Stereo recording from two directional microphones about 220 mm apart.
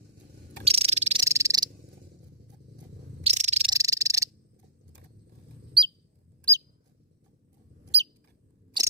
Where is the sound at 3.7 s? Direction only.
15° right (ahead or behind).